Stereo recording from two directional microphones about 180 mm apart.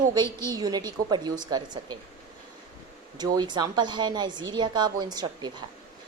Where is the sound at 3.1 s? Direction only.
25° right (ahead or behind).